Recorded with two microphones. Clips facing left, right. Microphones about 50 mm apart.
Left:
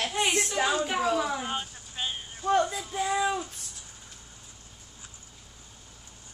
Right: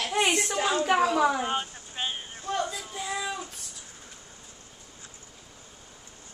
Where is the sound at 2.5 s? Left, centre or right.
Left.